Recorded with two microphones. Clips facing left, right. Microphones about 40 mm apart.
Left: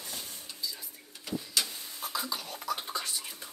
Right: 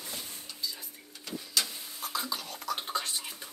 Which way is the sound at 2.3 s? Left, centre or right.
Centre.